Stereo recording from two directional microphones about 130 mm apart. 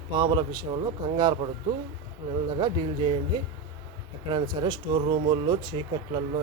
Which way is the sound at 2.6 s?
40° right (ahead or behind).